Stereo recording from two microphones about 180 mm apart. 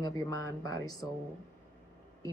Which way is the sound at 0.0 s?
20° left (ahead or behind).